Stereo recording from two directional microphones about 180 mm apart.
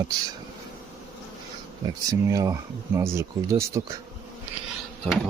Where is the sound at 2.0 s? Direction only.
20° right (ahead or behind).